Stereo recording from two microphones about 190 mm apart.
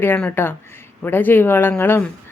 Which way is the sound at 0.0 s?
10° left (ahead or behind).